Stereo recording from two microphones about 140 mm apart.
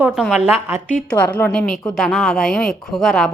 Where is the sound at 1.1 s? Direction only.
10° left (ahead or behind).